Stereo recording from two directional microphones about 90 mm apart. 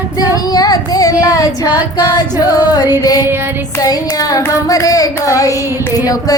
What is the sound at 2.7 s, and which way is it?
Child singing, 45° left (ahead or behind).